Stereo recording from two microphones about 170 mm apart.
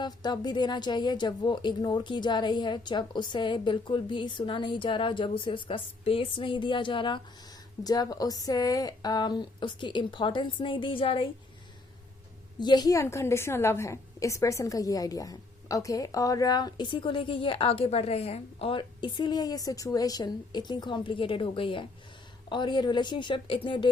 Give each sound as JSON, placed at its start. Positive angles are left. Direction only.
{"t": 0.0, "sound": "a woman's voice", "side_deg": 25}
{"t": 12.5, "sound": "a woman's voice", "side_deg": 25}